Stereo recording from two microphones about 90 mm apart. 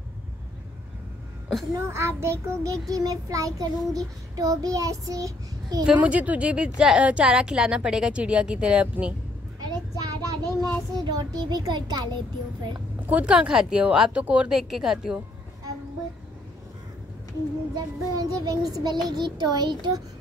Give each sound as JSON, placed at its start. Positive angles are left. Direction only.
{"t": 1.7, "sound": "a child's voice", "side_deg": -30}
{"t": 2.9, "sound": "child singing", "side_deg": -40}
{"t": 5.9, "sound": "a woman's voice", "side_deg": -15}
{"t": 9.6, "sound": "child singing", "side_deg": -45}
{"t": 13.0, "sound": "a woman's voice", "side_deg": -15}
{"t": 17.7, "sound": "child singing", "side_deg": -50}